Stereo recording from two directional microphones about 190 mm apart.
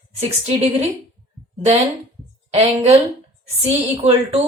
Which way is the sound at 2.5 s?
35° right (ahead or behind).